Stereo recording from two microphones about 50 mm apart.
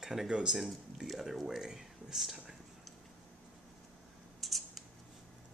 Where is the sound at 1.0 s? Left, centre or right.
Centre.